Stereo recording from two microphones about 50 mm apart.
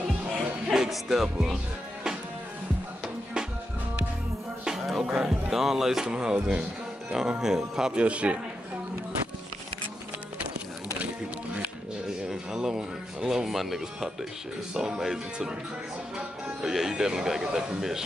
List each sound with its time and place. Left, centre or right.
0.7 s speech: centre
4.6 s speech: centre
8.0 s a man's voice: right
12.5 s speech: centre
16.6 s speech: centre